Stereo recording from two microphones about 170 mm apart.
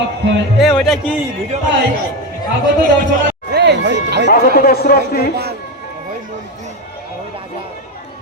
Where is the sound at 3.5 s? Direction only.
85° right.